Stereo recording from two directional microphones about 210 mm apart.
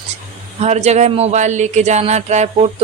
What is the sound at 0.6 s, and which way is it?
Speech, 30° right (ahead or behind).